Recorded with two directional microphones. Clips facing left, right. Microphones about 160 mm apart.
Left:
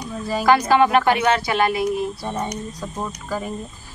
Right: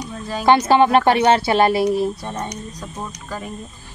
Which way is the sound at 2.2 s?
10° left (ahead or behind).